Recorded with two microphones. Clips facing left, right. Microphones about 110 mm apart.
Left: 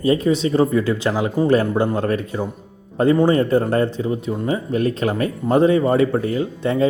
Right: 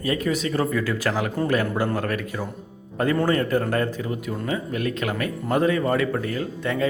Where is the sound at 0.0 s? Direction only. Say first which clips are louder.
Left 7 dB; 30° left (ahead or behind).